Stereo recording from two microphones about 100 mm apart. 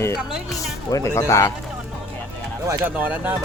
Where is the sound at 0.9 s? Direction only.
35° left (ahead or behind).